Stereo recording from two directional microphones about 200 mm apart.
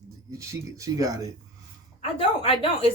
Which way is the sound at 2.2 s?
25° left (ahead or behind).